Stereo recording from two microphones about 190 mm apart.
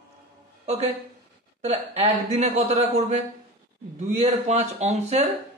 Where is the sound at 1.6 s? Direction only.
35° right (ahead or behind).